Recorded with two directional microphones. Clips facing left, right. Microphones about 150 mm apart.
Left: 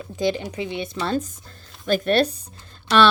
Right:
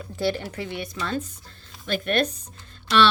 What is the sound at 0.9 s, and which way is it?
Speech, 35° left (ahead or behind).